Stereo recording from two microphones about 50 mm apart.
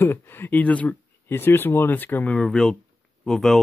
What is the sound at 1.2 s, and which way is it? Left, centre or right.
Speech, left.